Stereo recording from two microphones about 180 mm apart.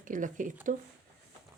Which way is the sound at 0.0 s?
45° right (ahead or behind).